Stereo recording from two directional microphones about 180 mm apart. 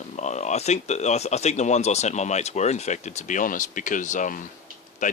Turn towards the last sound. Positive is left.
turn(degrees=45)  # may be behind; listen again after turning